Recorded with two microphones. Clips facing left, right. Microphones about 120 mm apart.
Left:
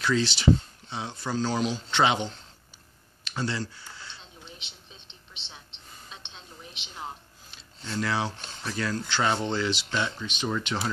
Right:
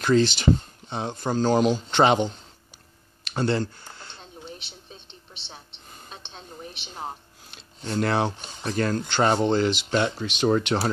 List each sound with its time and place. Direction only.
0.0 s speech: 50° right (ahead or behind)
3.3 s a sound: 55° right (ahead or behind)
6.0 s a sound: 45° right (ahead or behind)
7.5 s speech: 50° right (ahead or behind)
10.2 s speech: 75° right (ahead or behind)
10.5 s speech: 60° right (ahead or behind)